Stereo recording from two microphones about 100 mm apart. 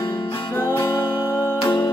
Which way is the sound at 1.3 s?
20° right (ahead or behind).